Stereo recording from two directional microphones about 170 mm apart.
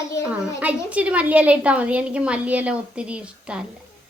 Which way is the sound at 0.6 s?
5° right (ahead or behind).